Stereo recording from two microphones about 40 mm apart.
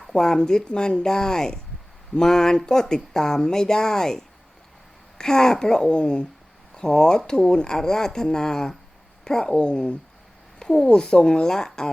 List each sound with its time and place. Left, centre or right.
0.1 s speech: centre
10.6 s a sound: centre
10.8 s speech: left